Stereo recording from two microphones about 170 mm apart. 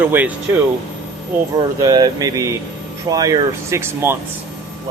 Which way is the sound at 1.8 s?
20° right (ahead or behind).